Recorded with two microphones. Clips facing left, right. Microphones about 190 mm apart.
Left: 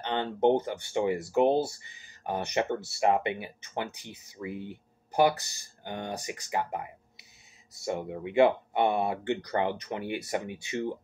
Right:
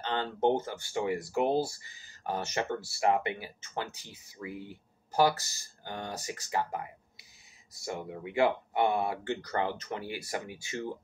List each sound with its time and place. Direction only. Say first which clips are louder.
0.0 s speech: left 3 dB; 20° left (ahead or behind)